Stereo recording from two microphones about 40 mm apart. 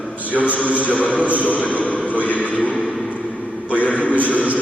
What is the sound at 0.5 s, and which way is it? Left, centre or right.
Speech, left.